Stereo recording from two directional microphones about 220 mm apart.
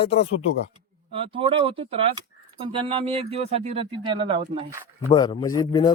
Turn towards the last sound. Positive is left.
turn(degrees=15)  # may be behind; listen again after turning